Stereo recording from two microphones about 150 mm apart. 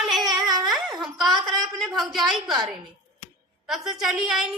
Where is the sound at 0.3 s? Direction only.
25° right (ahead or behind).